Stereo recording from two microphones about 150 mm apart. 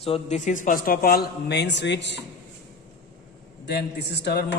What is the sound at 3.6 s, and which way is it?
Speech, 90° left.